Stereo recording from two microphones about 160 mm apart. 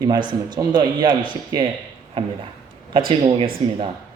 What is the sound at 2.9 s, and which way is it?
Speech, 30° right (ahead or behind).